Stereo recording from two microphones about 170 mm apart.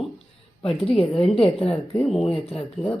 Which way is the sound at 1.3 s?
35° left (ahead or behind).